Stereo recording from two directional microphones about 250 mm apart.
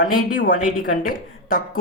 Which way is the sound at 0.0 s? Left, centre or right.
Left.